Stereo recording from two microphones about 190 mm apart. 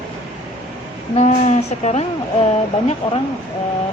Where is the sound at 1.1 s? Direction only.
35° left (ahead or behind).